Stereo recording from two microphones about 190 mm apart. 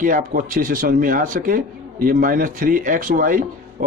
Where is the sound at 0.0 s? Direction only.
45° right (ahead or behind).